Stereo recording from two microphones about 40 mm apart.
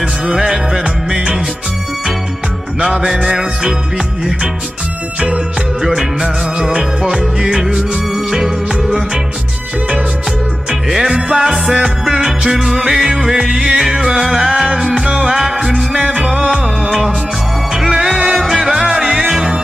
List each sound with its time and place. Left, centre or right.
0.3 s music: centre
2.8 s music: centre
5.8 s music: centre
7.6 s music: centre
10.9 s music: centre
15.9 s music: centre